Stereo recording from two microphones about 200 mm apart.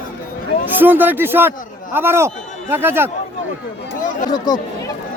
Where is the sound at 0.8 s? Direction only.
10° right (ahead or behind).